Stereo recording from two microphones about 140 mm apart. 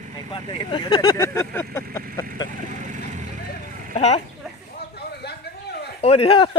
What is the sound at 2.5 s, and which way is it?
Vehicle, 65° right (ahead or behind).